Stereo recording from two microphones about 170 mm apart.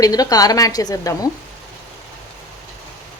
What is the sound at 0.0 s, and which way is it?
A woman's voice, 20° left (ahead or behind).